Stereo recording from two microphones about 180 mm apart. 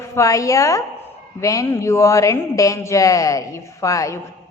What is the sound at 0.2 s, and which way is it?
Speech, 20° left (ahead or behind).